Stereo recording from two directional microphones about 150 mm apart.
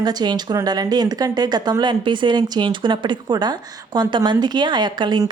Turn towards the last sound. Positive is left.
turn(degrees=-30)  # may be behind; listen again after turning